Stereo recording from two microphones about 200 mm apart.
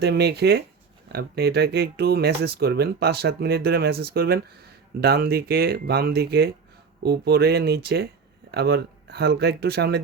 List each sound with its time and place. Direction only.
0.0 s speech: 55° right (ahead or behind)